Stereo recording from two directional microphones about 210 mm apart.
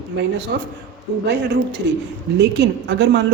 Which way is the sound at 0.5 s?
55° right (ahead or behind).